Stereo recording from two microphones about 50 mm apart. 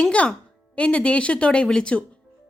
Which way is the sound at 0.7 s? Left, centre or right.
Left.